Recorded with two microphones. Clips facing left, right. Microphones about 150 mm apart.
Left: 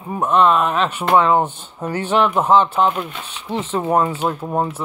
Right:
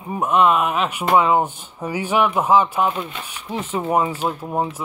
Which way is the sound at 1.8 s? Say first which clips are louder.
Left 2 dB; 10° right (ahead or behind).